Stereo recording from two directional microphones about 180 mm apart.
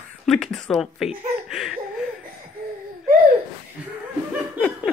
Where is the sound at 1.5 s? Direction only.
Centre (ahead or behind).